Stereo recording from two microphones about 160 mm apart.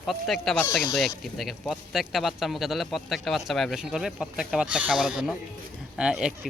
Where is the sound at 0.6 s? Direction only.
15° left (ahead or behind).